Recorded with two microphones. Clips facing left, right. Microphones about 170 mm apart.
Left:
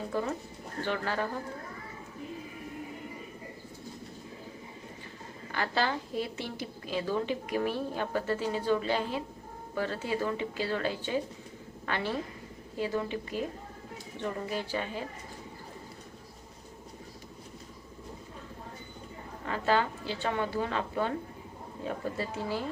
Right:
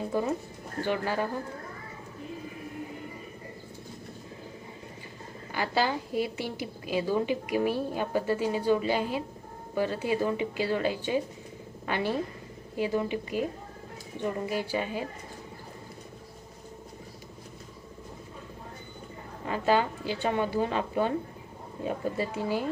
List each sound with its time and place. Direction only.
0.1 s a woman's voice: 15° right (ahead or behind)
5.5 s a woman's voice: 10° right (ahead or behind)
19.5 s a woman's voice: 15° right (ahead or behind)